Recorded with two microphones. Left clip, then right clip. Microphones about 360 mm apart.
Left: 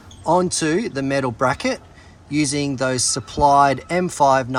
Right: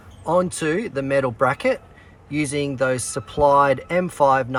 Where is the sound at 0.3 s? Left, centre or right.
Centre.